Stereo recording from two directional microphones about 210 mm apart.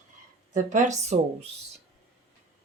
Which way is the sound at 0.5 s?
35° right (ahead or behind).